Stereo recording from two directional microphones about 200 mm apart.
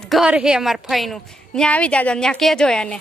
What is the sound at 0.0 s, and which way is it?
A woman's voice, centre (ahead or behind).